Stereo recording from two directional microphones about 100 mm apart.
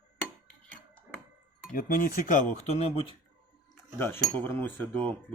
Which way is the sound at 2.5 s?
90° left.